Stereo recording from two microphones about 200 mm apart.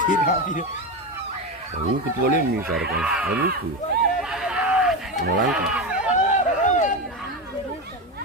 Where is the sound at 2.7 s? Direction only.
50° right (ahead or behind).